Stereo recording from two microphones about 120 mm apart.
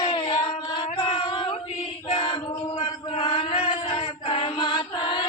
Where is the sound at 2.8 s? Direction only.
45° left (ahead or behind).